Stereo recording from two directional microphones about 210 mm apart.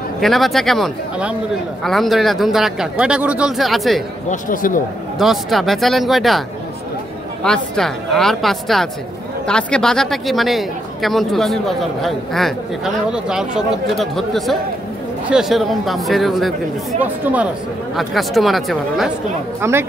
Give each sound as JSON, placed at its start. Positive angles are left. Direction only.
{"t": 0.2, "sound": "speech", "side_deg": 0}
{"t": 4.3, "sound": "speech", "side_deg": 40}
{"t": 5.2, "sound": "speech", "side_deg": 0}
{"t": 7.4, "sound": "speech", "side_deg": 5}
{"t": 19.6, "sound": "speech", "side_deg": -10}